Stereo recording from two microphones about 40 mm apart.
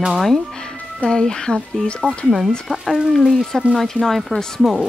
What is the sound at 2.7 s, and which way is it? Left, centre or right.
Speech, centre.